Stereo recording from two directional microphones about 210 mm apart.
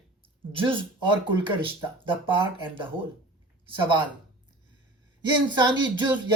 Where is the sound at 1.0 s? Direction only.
25° right (ahead or behind).